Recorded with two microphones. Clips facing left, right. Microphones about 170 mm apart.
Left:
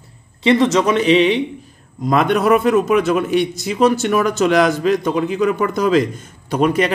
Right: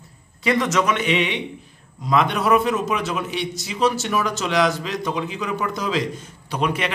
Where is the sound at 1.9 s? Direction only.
50° left (ahead or behind).